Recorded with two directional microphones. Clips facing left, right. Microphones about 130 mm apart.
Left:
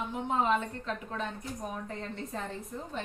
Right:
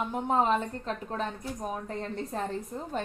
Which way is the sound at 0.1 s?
45° right (ahead or behind).